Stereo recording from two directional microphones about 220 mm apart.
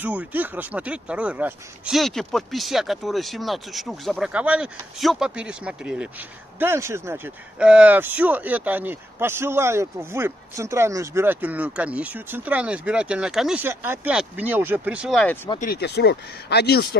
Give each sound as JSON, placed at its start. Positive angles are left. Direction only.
{"t": 0.0, "sound": "speech", "side_deg": -5}
{"t": 15.6, "sound": "speech", "side_deg": 45}